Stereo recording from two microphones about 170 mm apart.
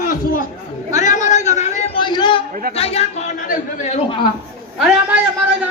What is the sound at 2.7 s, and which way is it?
Speech, 35° left (ahead or behind).